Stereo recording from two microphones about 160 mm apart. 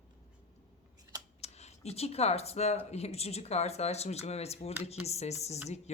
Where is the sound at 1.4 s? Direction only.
40° left (ahead or behind).